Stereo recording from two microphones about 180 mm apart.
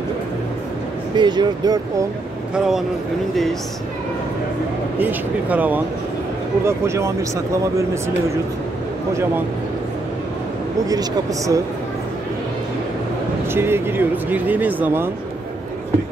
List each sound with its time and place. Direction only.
1.1 s speech: 25° right (ahead or behind)
2.5 s speech: 5° right (ahead or behind)
4.9 s speech: 10° right (ahead or behind)
9.1 s speech: 15° right (ahead or behind)
10.9 s speech: 20° right (ahead or behind)
13.5 s speech: 15° right (ahead or behind)